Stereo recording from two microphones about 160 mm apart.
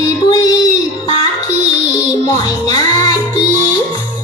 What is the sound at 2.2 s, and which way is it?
Music, 25° left (ahead or behind).